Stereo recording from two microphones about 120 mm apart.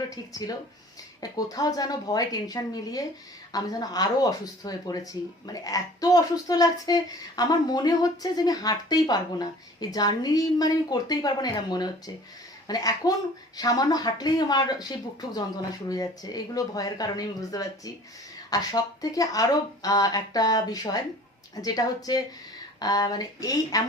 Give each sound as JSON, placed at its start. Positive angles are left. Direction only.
{"t": 0.1, "sound": "speech", "side_deg": 30}